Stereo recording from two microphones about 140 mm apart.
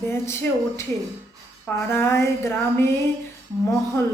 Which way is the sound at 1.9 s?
20° left (ahead or behind).